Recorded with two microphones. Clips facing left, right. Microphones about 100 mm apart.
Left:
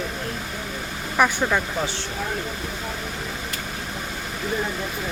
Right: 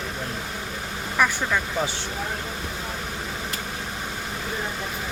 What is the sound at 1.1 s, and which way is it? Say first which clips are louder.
Speech: left 3 dB; 20° left (ahead or behind).